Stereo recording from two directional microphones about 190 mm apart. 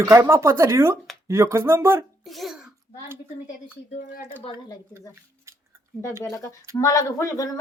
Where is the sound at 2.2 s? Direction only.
Centre (ahead or behind).